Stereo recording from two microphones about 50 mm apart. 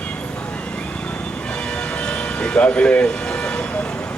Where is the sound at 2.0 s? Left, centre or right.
Centre.